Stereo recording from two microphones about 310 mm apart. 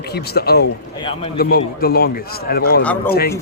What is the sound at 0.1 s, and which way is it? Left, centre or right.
A man's voice, left.